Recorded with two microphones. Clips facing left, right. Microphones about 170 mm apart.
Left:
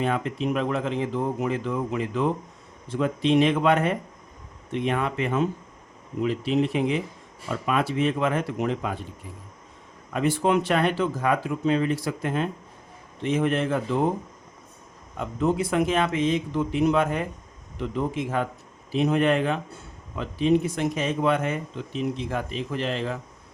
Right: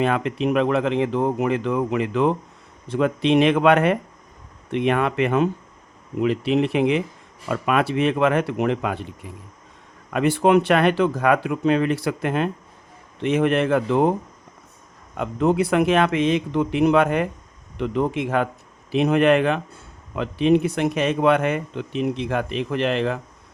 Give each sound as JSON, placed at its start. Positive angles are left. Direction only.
{"t": 0.0, "sound": "speech", "side_deg": -75}
{"t": 10.1, "sound": "speech", "side_deg": -70}
{"t": 15.2, "sound": "speech", "side_deg": -70}